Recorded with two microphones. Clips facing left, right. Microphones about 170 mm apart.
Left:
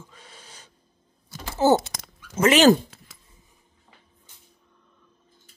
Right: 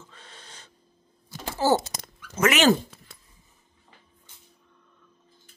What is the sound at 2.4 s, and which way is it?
Speech, 30° left (ahead or behind).